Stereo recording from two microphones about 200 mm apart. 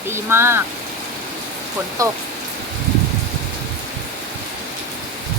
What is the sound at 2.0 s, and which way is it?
Speech, 15° right (ahead or behind).